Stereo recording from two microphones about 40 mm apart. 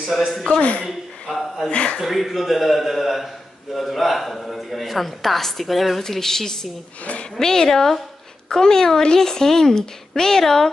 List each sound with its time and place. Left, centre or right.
0.0 s a man's voice: centre
0.5 s a woman's voice: left
2.0 s speech: centre